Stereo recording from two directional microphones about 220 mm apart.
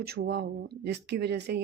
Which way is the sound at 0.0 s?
50° right (ahead or behind).